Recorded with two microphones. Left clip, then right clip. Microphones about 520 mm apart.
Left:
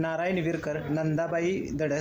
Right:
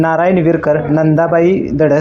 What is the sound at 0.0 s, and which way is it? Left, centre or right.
Speech, left.